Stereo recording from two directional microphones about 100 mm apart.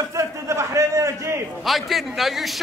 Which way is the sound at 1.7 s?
Centre (ahead or behind).